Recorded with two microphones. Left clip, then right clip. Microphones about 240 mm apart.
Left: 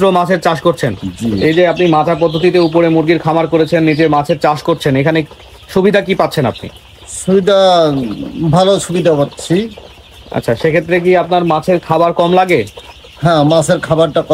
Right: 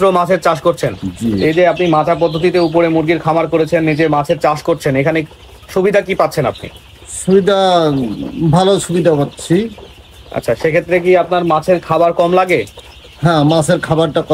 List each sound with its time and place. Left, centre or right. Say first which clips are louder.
0.0 s speech: even; left
7.3 s speech: left 2 dB; centre
10.3 s speech: left 1 dB; left
13.2 s speech: left 2 dB; centre